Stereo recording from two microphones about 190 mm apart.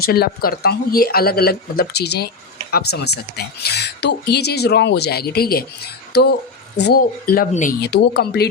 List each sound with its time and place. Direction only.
0.0 s speech: 50° left (ahead or behind)
7.8 s speech: 60° left (ahead or behind)